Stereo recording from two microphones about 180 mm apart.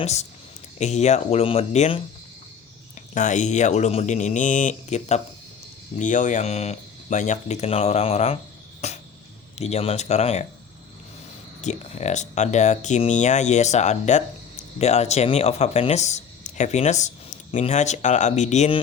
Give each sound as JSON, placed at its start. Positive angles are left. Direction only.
{"t": 0.0, "sound": "speech", "side_deg": 40}
{"t": 3.2, "sound": "speech", "side_deg": 40}
{"t": 8.8, "sound": "a sound", "side_deg": 40}
{"t": 9.6, "sound": "speech", "side_deg": 35}
{"t": 11.6, "sound": "speech", "side_deg": 40}